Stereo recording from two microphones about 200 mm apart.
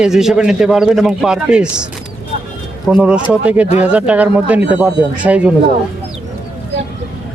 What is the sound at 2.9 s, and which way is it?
Speech, 5° right (ahead or behind).